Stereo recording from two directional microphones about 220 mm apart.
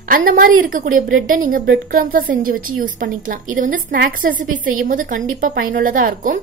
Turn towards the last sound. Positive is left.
turn(degrees=-35)  # may be behind; listen again after turning